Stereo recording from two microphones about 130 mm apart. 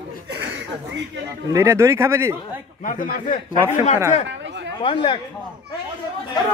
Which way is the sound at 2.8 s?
90° left.